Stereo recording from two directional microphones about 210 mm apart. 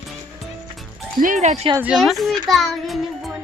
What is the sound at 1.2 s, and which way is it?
Speech, 35° right (ahead or behind).